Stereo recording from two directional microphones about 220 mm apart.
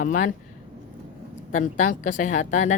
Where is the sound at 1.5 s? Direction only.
35° left (ahead or behind).